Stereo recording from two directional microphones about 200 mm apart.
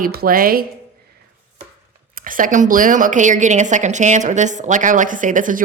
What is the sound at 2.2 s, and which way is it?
A woman's voice, 40° right (ahead or behind).